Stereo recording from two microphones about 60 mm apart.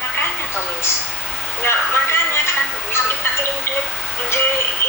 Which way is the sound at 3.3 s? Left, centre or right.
Left.